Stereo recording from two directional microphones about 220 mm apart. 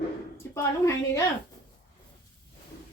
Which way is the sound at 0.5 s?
15° left (ahead or behind).